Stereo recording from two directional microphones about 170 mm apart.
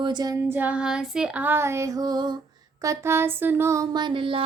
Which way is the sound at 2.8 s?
15° right (ahead or behind).